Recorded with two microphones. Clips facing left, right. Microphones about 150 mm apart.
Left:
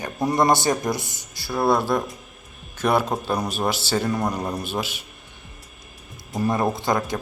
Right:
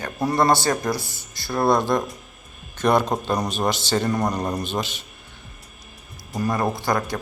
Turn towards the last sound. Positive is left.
turn(degrees=20)  # may be behind; listen again after turning